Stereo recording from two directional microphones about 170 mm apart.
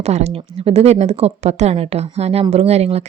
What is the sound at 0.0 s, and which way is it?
Speech, 40° right (ahead or behind).